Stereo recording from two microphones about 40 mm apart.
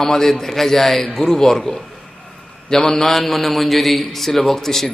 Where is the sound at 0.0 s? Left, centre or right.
Centre.